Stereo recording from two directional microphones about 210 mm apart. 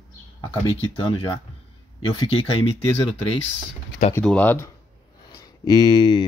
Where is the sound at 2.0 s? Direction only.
25° left (ahead or behind).